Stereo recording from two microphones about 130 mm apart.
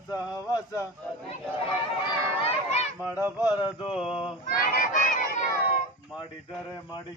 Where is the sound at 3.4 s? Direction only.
40° left (ahead or behind).